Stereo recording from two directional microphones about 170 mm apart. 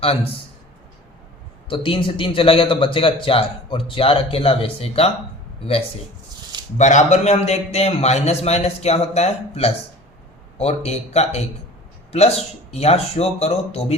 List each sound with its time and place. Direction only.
1.7 s a man's voice: 30° left (ahead or behind)
6.7 s a man's voice: 45° left (ahead or behind)